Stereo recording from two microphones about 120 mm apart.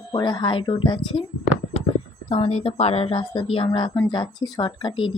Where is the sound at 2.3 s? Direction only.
60° left (ahead or behind).